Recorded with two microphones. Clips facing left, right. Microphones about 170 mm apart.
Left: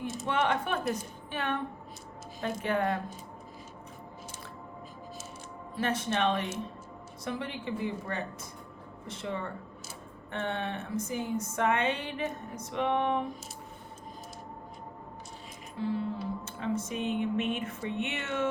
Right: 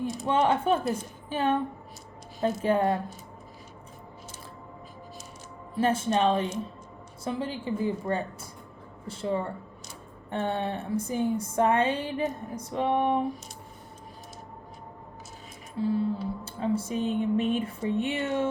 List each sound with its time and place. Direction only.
0.3 s a woman's voice: 30° right (ahead or behind)
5.8 s a woman's voice: 30° right (ahead or behind)
15.8 s speech: 30° right (ahead or behind)